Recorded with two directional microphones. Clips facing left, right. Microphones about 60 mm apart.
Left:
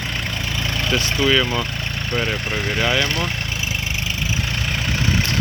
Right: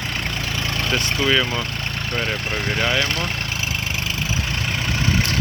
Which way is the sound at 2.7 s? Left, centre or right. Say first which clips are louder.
Left 2 dB; centre.